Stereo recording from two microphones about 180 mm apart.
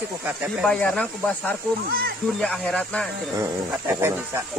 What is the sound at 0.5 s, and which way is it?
Speech, 5° left (ahead or behind).